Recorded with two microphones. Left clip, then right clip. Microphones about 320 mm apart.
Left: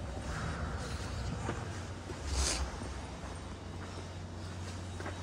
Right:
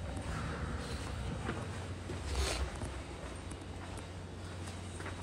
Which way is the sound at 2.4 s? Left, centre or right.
Centre.